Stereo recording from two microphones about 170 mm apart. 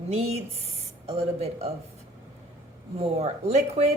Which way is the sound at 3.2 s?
40° right (ahead or behind).